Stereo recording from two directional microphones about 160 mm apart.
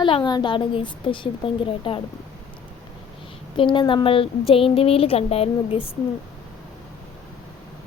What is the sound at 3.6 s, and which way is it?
Speech, 30° left (ahead or behind).